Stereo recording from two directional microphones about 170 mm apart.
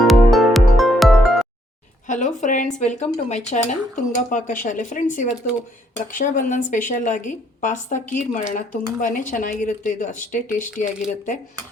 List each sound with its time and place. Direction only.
0.0 s music: centre (ahead or behind)
2.0 s a woman's voice: 45° left (ahead or behind)